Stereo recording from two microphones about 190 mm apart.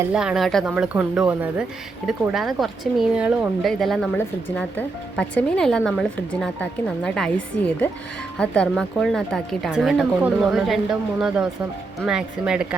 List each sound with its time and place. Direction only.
0.0 s speech: 5° right (ahead or behind)